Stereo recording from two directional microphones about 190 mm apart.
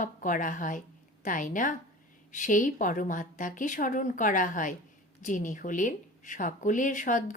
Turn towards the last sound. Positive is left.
turn(degrees=40)  # may be behind; listen again after turning